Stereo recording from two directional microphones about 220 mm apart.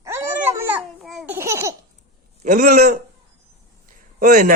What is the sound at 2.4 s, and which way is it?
Speech, 35° right (ahead or behind).